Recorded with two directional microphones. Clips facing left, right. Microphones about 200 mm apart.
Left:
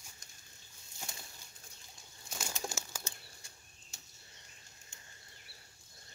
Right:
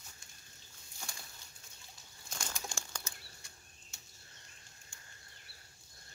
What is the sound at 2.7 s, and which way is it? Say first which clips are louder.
Bird flight: left 2 dB; 5° left (ahead or behind).